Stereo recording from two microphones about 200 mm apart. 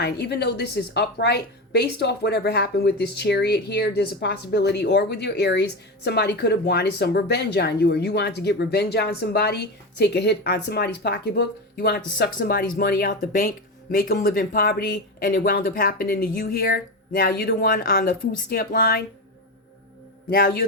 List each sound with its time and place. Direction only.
0.0 s a woman's voice: 55° left (ahead or behind)
20.3 s speech: 55° left (ahead or behind)